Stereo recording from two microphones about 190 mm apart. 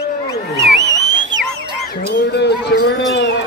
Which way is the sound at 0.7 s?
65° right (ahead or behind).